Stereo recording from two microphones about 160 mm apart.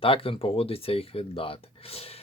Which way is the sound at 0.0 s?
35° left (ahead or behind).